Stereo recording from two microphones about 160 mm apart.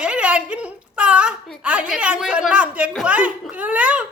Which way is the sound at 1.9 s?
5° right (ahead or behind).